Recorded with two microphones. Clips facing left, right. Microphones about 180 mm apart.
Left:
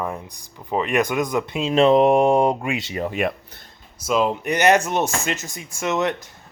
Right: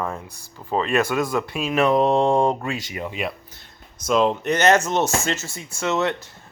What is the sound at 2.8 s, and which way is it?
Speech, 25° left (ahead or behind).